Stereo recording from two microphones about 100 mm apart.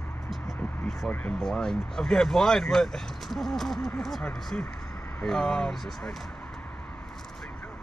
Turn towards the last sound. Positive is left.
turn(degrees=5)  # may be behind; listen again after turning